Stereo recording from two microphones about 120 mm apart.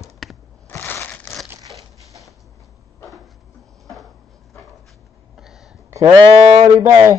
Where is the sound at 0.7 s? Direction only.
15° left (ahead or behind).